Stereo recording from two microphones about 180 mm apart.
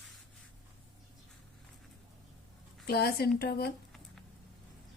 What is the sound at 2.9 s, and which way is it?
Speech, 60° left (ahead or behind).